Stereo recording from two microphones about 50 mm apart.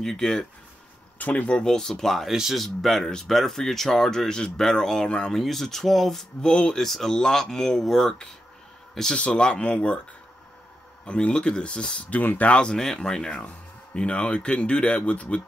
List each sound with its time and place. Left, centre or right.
0.0 s speech: centre
1.1 s speech: left
1.6 s speech: centre
2.2 s speech: centre
5.3 s speech: centre
6.4 s speech: centre
6.8 s speech: centre
9.2 s speech: centre
11.1 s speech: left
12.1 s speech: left
12.7 s speech: centre